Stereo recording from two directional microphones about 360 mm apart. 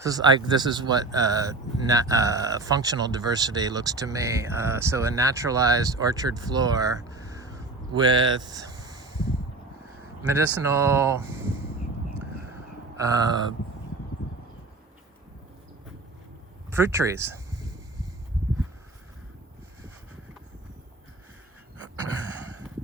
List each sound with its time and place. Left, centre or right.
0.0 s speech: centre
10.3 s speech: centre
13.0 s speech: centre
16.6 s a sound: centre